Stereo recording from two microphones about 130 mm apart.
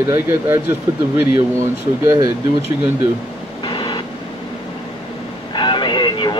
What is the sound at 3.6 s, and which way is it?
Vehicle, 35° left (ahead or behind).